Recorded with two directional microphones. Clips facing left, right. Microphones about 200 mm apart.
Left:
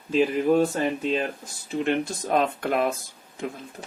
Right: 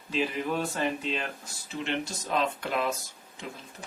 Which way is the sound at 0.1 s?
50° left (ahead or behind).